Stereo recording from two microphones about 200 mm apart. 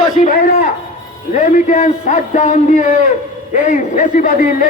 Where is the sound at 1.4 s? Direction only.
40° left (ahead or behind).